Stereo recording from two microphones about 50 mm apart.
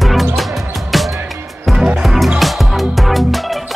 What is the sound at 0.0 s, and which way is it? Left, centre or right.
Music, centre.